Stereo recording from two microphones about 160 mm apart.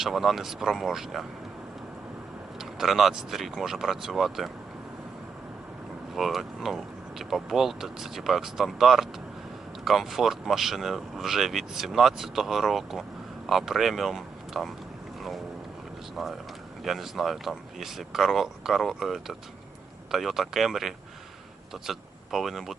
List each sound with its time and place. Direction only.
0.0 s speech: centre (ahead or behind)
2.6 s speech: centre (ahead or behind)
6.1 s speech: centre (ahead or behind)
16.8 s speech: centre (ahead or behind)